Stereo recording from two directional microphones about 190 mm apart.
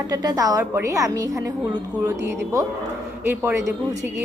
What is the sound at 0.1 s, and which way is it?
A woman's voice, 20° right (ahead or behind).